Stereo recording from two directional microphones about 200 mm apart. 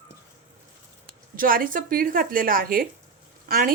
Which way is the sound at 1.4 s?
45° right (ahead or behind).